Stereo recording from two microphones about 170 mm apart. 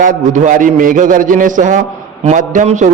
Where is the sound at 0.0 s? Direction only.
50° right (ahead or behind).